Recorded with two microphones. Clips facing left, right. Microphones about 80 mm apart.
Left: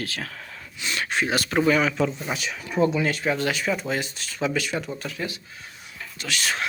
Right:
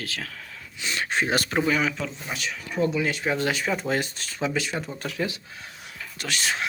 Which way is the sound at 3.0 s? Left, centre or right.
Centre.